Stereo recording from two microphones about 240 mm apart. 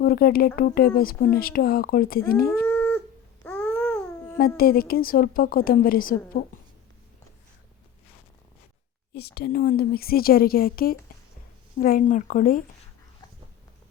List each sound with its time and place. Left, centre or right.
0.0 s speech: left
2.5 s livestock: centre
3.4 s a sound: centre
4.4 s speech: left
9.1 s speech: left